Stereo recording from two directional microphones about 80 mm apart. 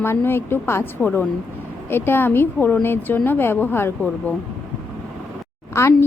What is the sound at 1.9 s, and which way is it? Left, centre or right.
A woman's voice, left.